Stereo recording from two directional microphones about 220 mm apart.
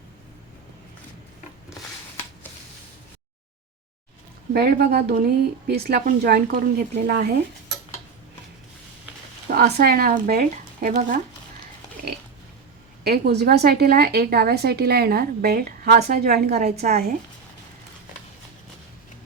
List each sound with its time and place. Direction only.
4.5 s speech: 45° right (ahead or behind)
9.5 s speech: 45° right (ahead or behind)
13.1 s speech: 45° right (ahead or behind)